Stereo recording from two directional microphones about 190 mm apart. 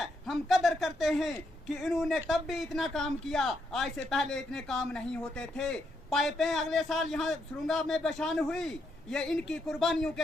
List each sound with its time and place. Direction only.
0.0 s a man's voice: centre (ahead or behind)